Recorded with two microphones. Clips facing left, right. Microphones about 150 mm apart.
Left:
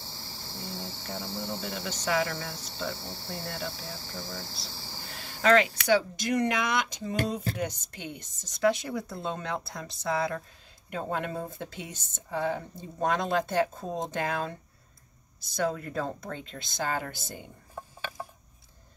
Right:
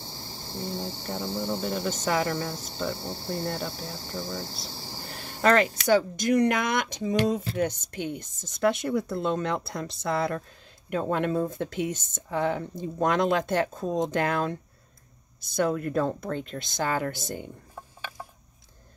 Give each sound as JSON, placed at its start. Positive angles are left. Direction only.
{"t": 0.1, "sound": "speech", "side_deg": -45}